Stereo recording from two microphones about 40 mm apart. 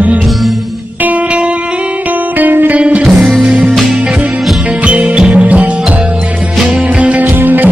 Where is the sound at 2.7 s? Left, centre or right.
Right.